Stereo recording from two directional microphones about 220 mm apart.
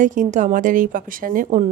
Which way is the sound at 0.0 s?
35° right (ahead or behind).